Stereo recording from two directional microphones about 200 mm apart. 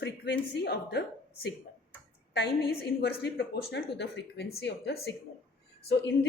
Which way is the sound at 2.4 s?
55° left (ahead or behind).